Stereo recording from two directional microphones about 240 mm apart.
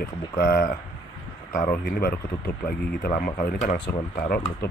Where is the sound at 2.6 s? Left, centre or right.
Left.